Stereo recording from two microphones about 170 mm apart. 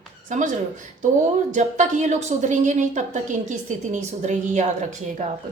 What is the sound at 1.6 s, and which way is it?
A woman's voice, 45° right (ahead or behind).